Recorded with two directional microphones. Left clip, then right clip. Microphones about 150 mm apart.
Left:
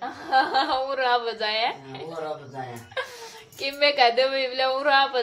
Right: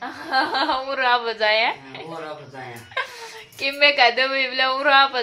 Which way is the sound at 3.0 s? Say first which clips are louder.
Right 5 dB; 25° right (ahead or behind).